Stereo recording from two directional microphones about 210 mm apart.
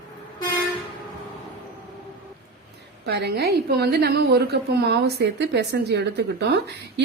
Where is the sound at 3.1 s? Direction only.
50° right (ahead or behind).